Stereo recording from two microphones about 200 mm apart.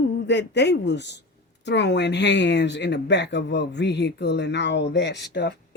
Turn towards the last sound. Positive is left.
turn(degrees=60)  # may be behind; listen again after turning